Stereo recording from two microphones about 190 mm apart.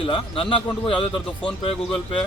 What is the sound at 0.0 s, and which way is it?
A man's voice, 25° left (ahead or behind).